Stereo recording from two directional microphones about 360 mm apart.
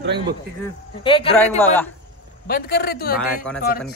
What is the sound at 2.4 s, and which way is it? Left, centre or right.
Speech, left.